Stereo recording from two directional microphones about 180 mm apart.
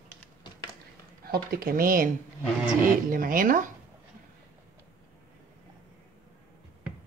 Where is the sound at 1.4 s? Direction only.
55° right (ahead or behind).